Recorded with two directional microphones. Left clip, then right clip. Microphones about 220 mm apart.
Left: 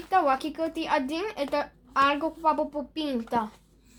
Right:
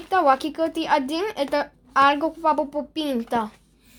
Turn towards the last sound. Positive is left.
turn(degrees=-35)  # may be behind; listen again after turning